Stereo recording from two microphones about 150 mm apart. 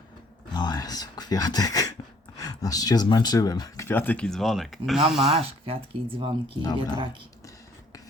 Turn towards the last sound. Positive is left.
turn(degrees=-35)  # may be behind; listen again after turning